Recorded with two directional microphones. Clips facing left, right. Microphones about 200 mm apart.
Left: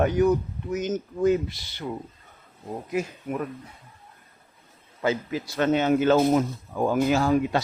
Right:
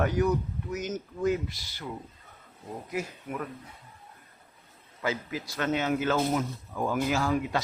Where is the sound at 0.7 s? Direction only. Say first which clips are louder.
Left 7 dB; 20° left (ahead or behind).